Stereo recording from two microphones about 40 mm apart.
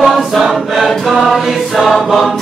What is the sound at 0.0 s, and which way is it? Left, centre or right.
Choir, centre.